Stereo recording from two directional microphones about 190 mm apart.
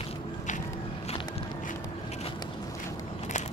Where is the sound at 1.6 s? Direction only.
35° left (ahead or behind).